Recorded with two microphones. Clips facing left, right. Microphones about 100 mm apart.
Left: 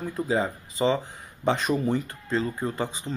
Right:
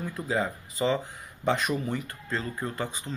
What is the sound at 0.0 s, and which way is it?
Speech, 25° left (ahead or behind).